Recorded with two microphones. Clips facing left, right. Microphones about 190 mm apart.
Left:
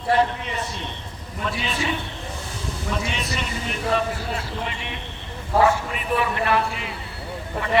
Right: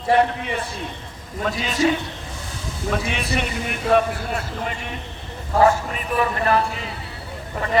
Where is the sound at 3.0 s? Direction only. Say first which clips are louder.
Right 4 dB; 55° right (ahead or behind).